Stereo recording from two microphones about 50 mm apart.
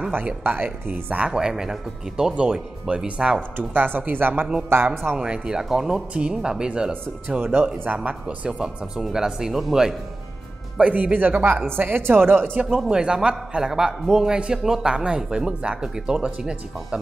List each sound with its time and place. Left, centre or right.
0.4 s speech: right
1.3 s a man's voice: centre
3.5 s speech: right
4.7 s speech: right
5.1 s a man's voice: right
8.5 s a man's voice: centre
10.8 s speech: right
11.7 s a woman's voice: right
12.6 s a man's voice: centre